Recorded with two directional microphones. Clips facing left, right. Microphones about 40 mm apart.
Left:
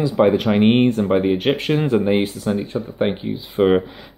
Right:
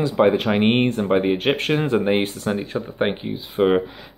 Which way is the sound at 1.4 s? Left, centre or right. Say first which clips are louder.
Left 1 dB; right.